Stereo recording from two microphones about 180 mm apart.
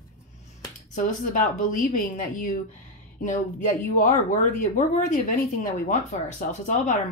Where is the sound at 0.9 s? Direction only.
45° left (ahead or behind).